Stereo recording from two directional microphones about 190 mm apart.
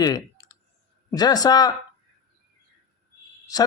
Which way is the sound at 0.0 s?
20° left (ahead or behind).